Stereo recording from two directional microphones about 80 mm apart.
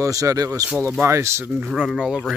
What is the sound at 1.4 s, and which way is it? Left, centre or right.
Speech, right.